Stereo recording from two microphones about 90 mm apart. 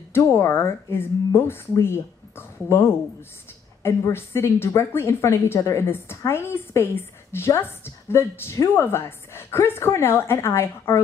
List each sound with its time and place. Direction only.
0.1 s a woman's voice: 30° left (ahead or behind)